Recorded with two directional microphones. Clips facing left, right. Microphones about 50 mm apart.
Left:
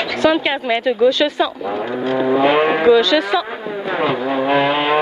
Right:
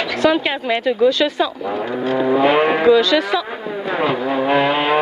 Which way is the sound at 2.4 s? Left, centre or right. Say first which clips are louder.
Even; left.